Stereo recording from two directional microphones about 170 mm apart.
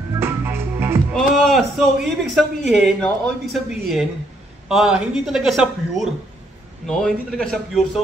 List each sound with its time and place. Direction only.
0.2 s music: 15° right (ahead or behind)
1.1 s speech: centre (ahead or behind)